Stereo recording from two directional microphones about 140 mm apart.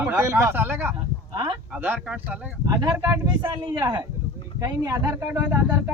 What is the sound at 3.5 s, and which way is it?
A man's voice, 30° right (ahead or behind).